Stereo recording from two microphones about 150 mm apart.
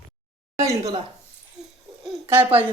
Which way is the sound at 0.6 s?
20° right (ahead or behind).